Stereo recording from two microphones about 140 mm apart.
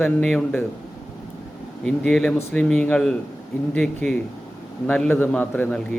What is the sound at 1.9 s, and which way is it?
Speech, 5° left (ahead or behind).